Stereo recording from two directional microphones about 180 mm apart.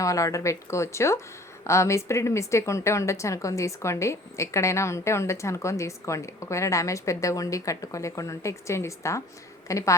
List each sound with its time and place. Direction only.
0.0 s a woman's voice: 20° left (ahead or behind)